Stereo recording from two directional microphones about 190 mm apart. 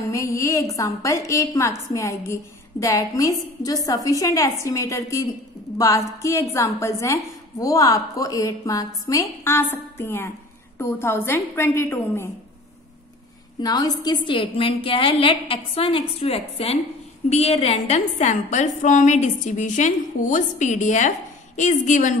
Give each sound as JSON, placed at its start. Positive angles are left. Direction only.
{"t": 0.1, "sound": "a woman's voice", "side_deg": 15}
{"t": 13.6, "sound": "a woman's voice", "side_deg": 20}